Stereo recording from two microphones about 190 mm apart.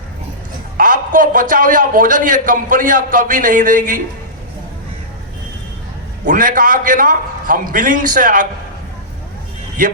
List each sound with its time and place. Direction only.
0.8 s a man's voice: 45° right (ahead or behind)
6.2 s a man's voice: 45° right (ahead or behind)
9.8 s a man's voice: 45° right (ahead or behind)